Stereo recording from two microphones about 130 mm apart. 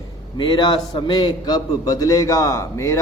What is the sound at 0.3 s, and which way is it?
A man's voice, 35° left (ahead or behind).